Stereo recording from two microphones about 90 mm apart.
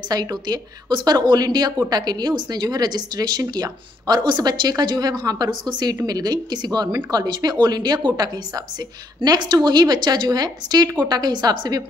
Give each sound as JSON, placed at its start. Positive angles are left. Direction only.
{"t": 0.1, "sound": "speech", "side_deg": -45}